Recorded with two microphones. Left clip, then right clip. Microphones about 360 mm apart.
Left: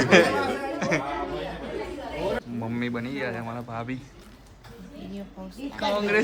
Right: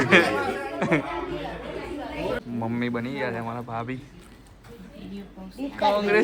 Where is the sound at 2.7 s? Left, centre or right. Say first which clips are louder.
Right 2 dB; centre.